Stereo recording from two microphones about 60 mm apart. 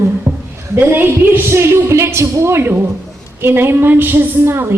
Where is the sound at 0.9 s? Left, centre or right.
Right.